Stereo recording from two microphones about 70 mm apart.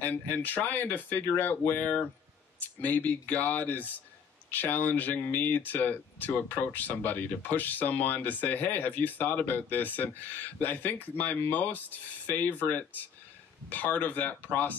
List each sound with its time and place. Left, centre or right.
0.0 s speech: left